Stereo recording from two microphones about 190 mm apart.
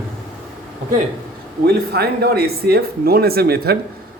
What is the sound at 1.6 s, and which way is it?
Speech, 55° right (ahead or behind).